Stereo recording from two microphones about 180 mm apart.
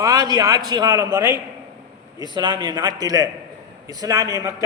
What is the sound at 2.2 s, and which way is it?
A man's voice, 25° right (ahead or behind).